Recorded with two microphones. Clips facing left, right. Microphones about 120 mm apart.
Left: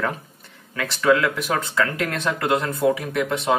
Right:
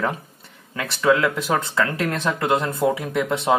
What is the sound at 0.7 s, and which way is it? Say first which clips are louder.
Speech: even; 25° right (ahead or behind).